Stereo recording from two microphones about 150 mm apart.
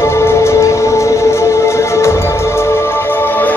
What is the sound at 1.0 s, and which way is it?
Music, 20° left (ahead or behind).